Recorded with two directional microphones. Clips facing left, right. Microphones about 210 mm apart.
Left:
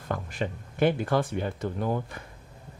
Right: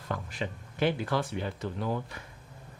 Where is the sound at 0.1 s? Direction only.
50° left (ahead or behind).